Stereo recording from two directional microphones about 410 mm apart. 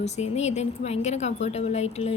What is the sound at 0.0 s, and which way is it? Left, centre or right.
A woman's voice, centre.